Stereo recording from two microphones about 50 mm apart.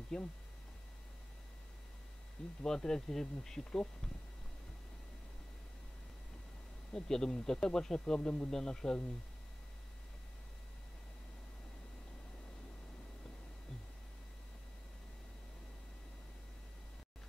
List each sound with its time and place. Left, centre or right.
0.1 s speech: centre
2.6 s speech: centre
6.9 s speech: centre